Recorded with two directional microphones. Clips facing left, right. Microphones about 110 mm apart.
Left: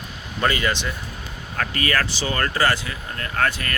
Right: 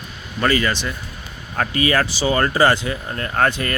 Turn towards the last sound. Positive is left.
turn(degrees=-25)  # may be behind; listen again after turning